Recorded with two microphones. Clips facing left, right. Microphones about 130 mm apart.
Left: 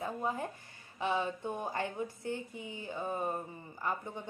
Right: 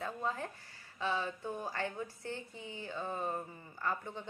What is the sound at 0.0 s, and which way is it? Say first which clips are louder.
A woman's voice: left 2 dB; 15° left (ahead or behind).